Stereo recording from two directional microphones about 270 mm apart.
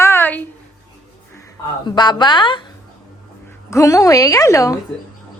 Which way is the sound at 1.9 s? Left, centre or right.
Centre.